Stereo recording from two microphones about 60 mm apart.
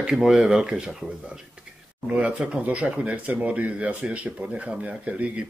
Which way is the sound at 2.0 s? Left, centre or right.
Right.